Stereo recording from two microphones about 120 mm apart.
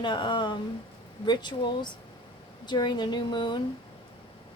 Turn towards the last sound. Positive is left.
turn(degrees=40)  # may be behind; listen again after turning